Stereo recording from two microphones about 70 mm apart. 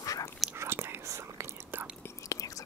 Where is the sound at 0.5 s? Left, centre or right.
Right.